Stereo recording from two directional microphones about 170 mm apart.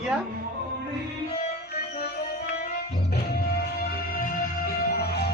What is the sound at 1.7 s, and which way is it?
Music, 65° left (ahead or behind).